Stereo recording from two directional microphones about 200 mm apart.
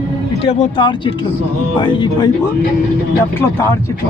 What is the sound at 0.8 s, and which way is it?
Speech, 25° left (ahead or behind).